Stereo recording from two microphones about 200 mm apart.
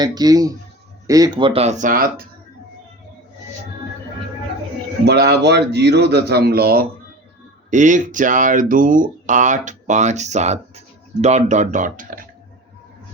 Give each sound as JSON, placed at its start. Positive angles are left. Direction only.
{"t": 0.0, "sound": "speech", "side_deg": -20}
{"t": 5.0, "sound": "speech", "side_deg": -55}
{"t": 7.7, "sound": "speech", "side_deg": -40}